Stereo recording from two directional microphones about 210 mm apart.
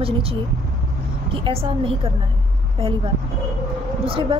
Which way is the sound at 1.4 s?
25° right (ahead or behind).